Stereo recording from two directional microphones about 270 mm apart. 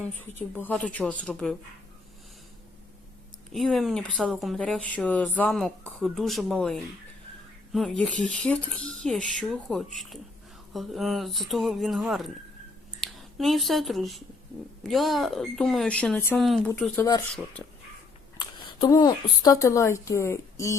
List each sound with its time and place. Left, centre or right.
0.2 s speech: centre
3.5 s speech: centre